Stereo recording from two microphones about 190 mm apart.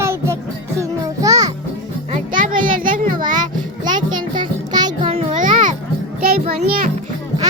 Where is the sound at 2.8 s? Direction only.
45° right (ahead or behind).